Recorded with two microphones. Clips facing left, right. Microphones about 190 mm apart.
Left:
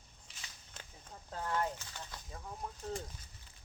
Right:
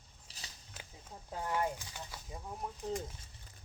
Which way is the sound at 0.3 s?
35° right (ahead or behind).